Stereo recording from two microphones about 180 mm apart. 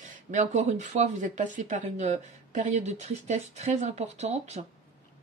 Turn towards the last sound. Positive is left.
turn(degrees=-40)  # may be behind; listen again after turning